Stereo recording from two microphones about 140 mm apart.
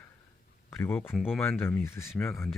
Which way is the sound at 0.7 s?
15° left (ahead or behind).